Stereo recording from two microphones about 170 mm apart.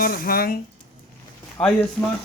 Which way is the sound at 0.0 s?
60° left (ahead or behind).